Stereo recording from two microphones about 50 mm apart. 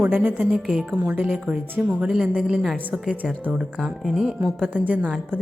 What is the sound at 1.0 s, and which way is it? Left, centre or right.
Speech, right.